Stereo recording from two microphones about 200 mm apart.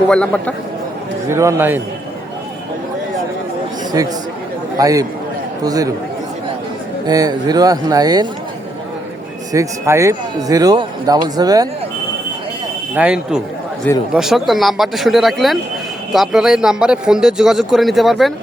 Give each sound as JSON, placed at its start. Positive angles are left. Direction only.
{"t": 0.1, "sound": "speech", "side_deg": 5}
{"t": 1.3, "sound": "a man's voice", "side_deg": -15}
{"t": 3.9, "sound": "a man's voice", "side_deg": -20}
{"t": 7.1, "sound": "speech", "side_deg": -20}
{"t": 9.5, "sound": "speech", "side_deg": -15}
{"t": 12.9, "sound": "speech", "side_deg": -5}